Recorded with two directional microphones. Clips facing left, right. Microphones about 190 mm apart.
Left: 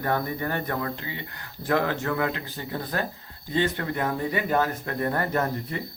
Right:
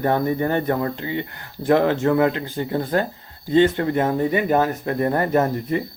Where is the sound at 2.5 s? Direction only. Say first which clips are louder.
Right 9 dB; 45° right (ahead or behind).